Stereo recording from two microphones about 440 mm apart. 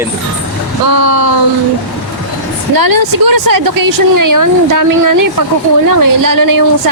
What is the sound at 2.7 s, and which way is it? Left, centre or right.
A woman's voice, right.